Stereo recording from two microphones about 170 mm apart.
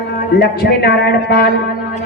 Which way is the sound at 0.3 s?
70° left (ahead or behind).